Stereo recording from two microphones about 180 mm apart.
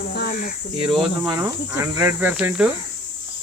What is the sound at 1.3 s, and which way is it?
Cricket, 15° right (ahead or behind).